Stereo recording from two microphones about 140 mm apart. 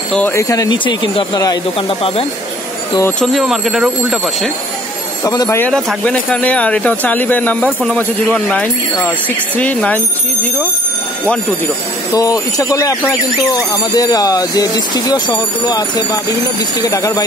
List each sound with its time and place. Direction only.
0.1 s speech: 15° left (ahead or behind); by 2.2 s 40° left (ahead or behind)
3.2 s speech: centre (ahead or behind)
5.2 s speech: 25° left (ahead or behind)
5.7 s speech: 5° left (ahead or behind)
12.1 s speech: 25° left (ahead or behind)